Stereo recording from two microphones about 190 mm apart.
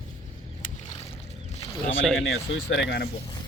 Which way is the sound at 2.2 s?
75° left (ahead or behind).